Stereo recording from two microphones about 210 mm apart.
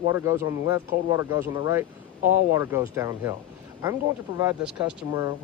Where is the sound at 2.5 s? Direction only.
15° right (ahead or behind).